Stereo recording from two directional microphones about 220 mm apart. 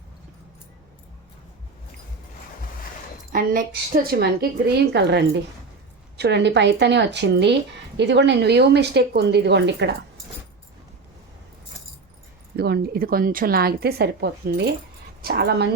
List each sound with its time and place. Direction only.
3.3 s a woman's voice: 40° right (ahead or behind)
12.5 s a woman's voice: 45° right (ahead or behind)